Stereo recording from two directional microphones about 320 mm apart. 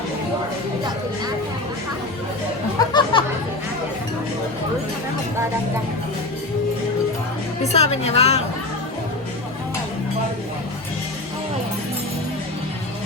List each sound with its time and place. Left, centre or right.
2.7 s music: centre
7.6 s a woman's voice: centre